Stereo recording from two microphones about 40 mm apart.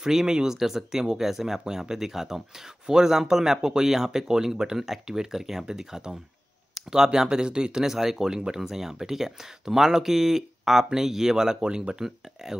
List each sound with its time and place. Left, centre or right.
0.0 s speech: centre